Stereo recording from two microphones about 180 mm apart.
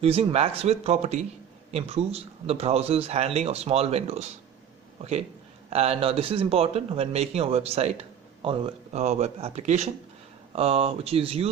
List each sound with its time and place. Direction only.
0.0 s a man's voice: 35° right (ahead or behind)
5.7 s a man's voice: 35° right (ahead or behind)